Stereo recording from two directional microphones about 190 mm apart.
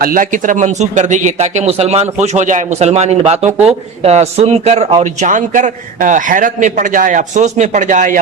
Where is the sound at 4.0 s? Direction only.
35° right (ahead or behind).